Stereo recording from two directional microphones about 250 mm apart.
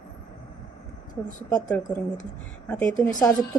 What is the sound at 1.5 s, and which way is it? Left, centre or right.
Speech, centre.